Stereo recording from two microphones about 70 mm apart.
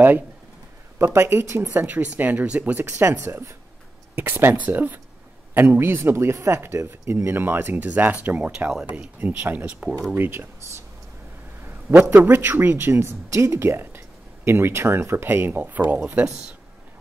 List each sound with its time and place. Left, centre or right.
0.9 s speech: right; by 9.1 s centre
9.2 s speech: right
12.2 s speech: right